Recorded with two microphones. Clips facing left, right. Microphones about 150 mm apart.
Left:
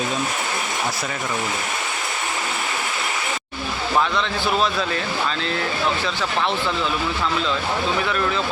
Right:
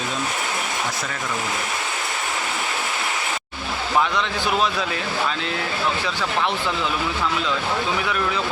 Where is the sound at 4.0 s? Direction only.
15° right (ahead or behind).